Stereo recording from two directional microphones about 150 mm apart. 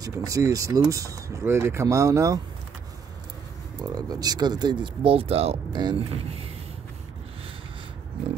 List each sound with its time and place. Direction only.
0.0 s speech: 25° right (ahead or behind)
3.8 s speech: 25° right (ahead or behind)